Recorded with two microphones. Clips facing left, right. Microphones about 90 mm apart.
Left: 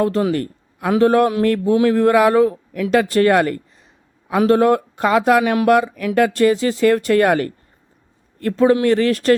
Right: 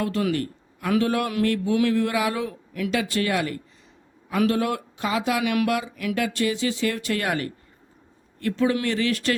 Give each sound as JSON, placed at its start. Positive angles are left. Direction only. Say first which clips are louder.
{"t": 0.0, "sound": "a man's voice", "louder": "left 7 dB", "side_deg": 30}
{"t": 2.5, "sound": "speech", "louder": "left 6 dB", "side_deg": 30}
{"t": 2.9, "sound": "speech", "louder": "left 11 dB", "side_deg": 45}
{"t": 4.3, "sound": "a man's voice", "louder": "left 9 dB", "side_deg": 40}